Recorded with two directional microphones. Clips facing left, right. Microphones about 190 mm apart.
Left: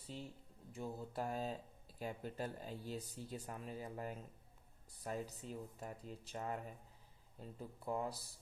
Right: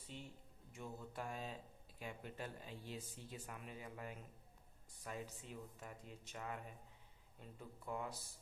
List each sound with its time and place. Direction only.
0.1 s speech: 35° left (ahead or behind)